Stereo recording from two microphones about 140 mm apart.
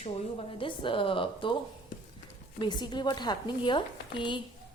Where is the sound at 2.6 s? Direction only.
30° left (ahead or behind).